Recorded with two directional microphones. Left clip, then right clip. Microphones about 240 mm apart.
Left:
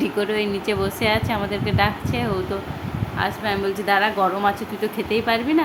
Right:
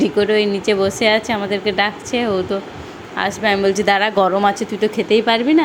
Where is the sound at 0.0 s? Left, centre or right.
Centre.